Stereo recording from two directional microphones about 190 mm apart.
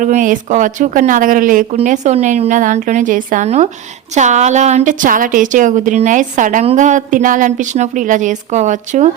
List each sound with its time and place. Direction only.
0.0 s a woman's voice: 45° right (ahead or behind)